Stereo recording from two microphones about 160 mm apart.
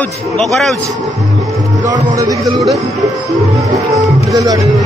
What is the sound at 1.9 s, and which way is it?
Speech, 20° right (ahead or behind).